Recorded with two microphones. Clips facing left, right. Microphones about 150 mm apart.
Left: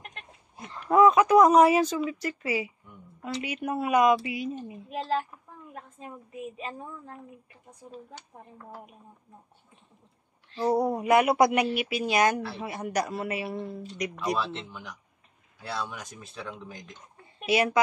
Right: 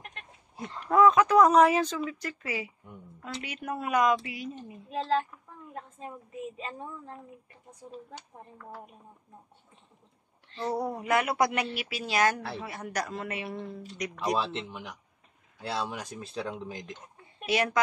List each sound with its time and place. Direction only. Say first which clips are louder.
0.8 s speech: left 2 dB; 10° left (ahead or behind)
10.5 s speech: left 6 dB; 10° left (ahead or behind)
14.4 s speech: even; 25° right (ahead or behind)
17.5 s speech: left 3 dB; 10° left (ahead or behind)